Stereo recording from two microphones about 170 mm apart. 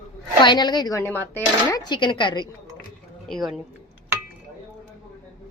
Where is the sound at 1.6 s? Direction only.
25° left (ahead or behind).